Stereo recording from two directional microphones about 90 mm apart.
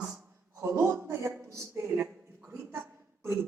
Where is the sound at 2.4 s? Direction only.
25° right (ahead or behind).